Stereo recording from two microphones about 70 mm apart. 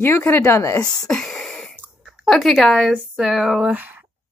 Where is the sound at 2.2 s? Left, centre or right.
Centre.